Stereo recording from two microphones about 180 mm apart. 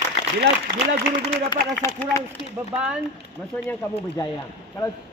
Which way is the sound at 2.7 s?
5° right (ahead or behind).